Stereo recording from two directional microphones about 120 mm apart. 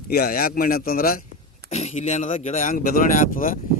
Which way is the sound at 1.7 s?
70° left (ahead or behind).